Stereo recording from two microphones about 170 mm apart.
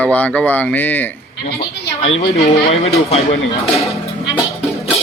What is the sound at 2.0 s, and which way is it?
A woman's voice, 35° left (ahead or behind).